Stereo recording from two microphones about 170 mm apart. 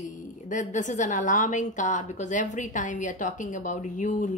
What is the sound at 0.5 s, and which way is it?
A woman's voice, 45° left (ahead or behind).